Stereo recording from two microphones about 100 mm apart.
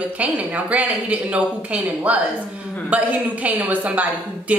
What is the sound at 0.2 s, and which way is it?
A woman's voice, 15° right (ahead or behind).